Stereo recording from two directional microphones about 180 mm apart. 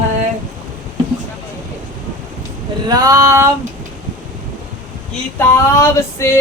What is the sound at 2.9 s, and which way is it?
Female singing, 20° right (ahead or behind).